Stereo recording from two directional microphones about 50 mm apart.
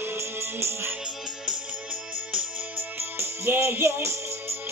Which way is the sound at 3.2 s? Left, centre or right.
Right.